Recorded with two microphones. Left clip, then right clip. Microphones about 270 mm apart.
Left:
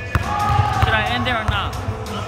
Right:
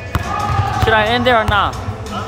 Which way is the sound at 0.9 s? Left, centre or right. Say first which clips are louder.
Right 7 dB; centre.